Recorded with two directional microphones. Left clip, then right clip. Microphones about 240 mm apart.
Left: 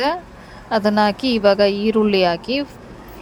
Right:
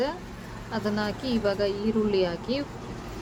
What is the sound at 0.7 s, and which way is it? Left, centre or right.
A woman's voice, left.